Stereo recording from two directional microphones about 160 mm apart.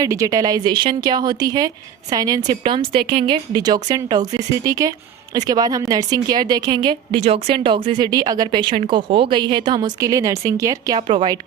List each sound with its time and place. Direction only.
0.0 s speech: 20° right (ahead or behind)